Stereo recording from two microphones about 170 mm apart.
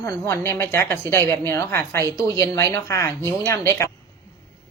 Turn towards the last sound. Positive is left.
turn(degrees=15)  # may be behind; listen again after turning